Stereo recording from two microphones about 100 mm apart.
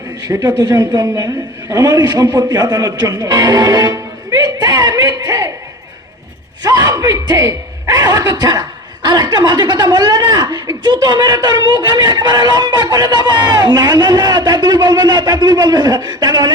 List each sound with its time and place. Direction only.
0.6 s speech: 45° right (ahead or behind)
6.6 s a woman's voice: 40° right (ahead or behind)